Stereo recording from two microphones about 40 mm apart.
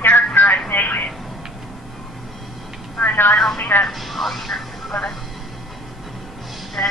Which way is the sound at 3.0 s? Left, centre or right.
Left.